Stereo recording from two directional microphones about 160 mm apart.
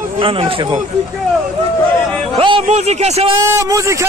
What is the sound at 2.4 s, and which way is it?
Speech, 40° right (ahead or behind).